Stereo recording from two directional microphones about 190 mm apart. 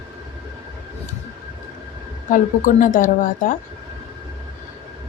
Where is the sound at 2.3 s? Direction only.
45° left (ahead or behind).